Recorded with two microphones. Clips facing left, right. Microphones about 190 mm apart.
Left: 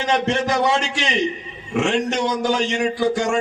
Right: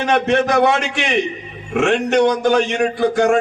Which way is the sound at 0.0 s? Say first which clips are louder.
Right 4 dB; 60° right (ahead or behind).